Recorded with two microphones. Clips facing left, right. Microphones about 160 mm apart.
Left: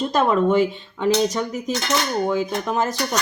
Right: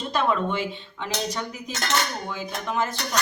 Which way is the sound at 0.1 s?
40° left (ahead or behind).